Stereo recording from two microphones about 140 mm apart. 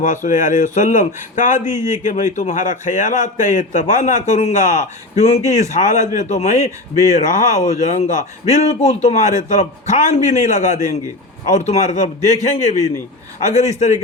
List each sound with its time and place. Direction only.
0.0 s a man's voice: 65° left (ahead or behind)